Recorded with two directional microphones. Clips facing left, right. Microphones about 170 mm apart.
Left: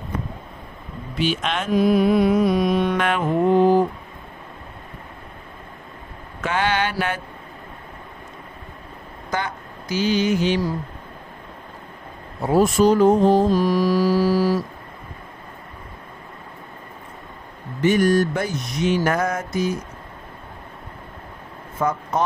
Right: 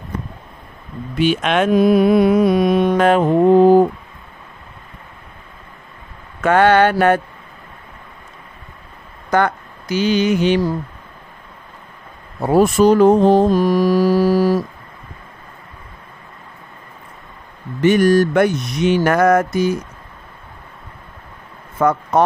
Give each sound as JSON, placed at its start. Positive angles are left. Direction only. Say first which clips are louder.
{"t": 1.1, "sound": "mantra", "louder": "right 7 dB", "side_deg": -55}
{"t": 2.9, "sound": "mantra", "louder": "right 8 dB", "side_deg": -40}
{"t": 6.4, "sound": "mantra", "louder": "right 10 dB", "side_deg": -60}
{"t": 9.3, "sound": "speech", "louder": "right 10 dB", "side_deg": -65}
{"t": 12.4, "sound": "mantra", "louder": "right 4 dB", "side_deg": -65}
{"t": 17.8, "sound": "mantra", "louder": "right 5 dB", "side_deg": -75}
{"t": 21.7, "sound": "speech", "louder": "right 7 dB", "side_deg": -65}